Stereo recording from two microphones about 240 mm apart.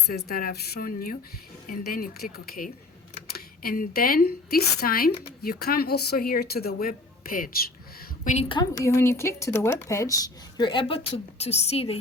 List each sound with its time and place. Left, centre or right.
0.1 s speech: left